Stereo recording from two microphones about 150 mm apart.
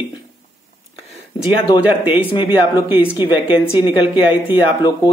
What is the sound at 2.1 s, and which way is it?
Speech, 40° left (ahead or behind).